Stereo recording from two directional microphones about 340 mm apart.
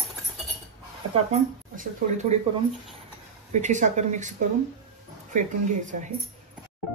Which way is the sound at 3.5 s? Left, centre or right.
Right.